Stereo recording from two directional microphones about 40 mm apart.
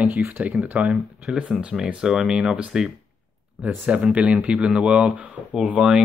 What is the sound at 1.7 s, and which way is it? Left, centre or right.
Speech, centre.